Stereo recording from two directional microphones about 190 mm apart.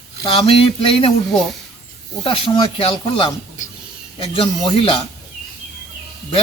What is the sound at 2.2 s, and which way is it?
Speech, 25° left (ahead or behind).